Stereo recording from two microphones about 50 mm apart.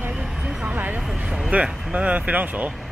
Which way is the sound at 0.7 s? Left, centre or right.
Right.